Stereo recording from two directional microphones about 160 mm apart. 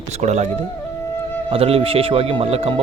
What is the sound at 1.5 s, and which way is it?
Speech, 35° right (ahead or behind).